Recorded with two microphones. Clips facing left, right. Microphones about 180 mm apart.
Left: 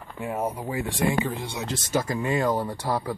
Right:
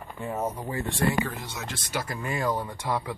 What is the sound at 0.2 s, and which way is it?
Speech, 10° left (ahead or behind).